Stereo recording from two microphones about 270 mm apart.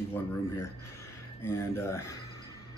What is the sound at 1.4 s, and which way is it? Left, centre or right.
Speech, centre.